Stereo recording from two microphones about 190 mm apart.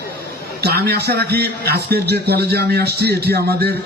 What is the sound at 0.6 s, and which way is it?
A man's voice, 60° right (ahead or behind).